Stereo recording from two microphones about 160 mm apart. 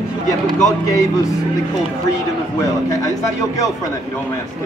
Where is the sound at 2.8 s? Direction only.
20° left (ahead or behind).